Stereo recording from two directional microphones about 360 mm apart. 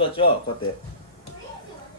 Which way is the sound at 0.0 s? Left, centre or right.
Centre.